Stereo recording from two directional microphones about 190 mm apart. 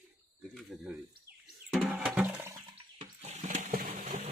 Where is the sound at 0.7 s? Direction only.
Centre (ahead or behind).